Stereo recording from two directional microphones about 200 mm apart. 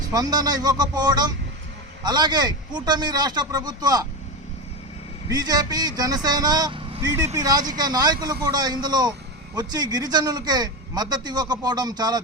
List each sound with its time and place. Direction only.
0.1 s a man's voice: 20° right (ahead or behind)
5.3 s a man's voice: 20° right (ahead or behind)